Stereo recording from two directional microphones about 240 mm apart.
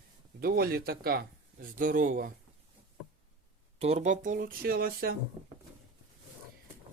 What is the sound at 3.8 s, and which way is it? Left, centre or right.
A man's voice, right.